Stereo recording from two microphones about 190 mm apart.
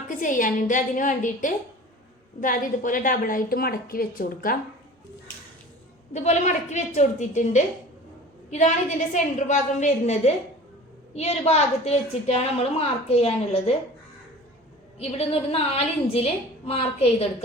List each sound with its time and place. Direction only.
0.1 s a woman's voice: 45° left (ahead or behind)
6.1 s a woman's voice: 40° left (ahead or behind)
14.9 s a woman's voice: 30° left (ahead or behind)